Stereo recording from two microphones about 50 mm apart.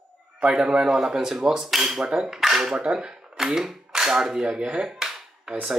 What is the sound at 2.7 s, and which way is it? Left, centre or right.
Speech, right.